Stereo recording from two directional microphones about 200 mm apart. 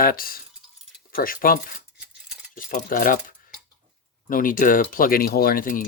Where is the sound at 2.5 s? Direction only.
45° left (ahead or behind).